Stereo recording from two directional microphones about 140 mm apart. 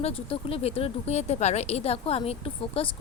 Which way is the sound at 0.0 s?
45° left (ahead or behind).